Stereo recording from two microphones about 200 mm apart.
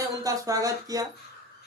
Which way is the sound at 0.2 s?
15° right (ahead or behind).